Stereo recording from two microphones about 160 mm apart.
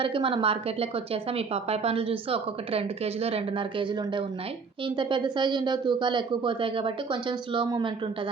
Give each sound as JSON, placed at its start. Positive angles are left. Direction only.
{"t": 0.0, "sound": "a woman's voice", "side_deg": -35}